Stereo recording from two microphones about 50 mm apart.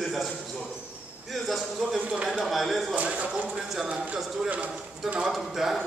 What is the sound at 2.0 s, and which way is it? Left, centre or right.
Speech, centre.